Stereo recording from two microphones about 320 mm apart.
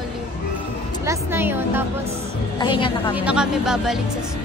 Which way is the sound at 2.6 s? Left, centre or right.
Centre.